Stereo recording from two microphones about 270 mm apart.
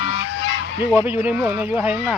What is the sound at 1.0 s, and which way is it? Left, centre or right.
Speech, centre.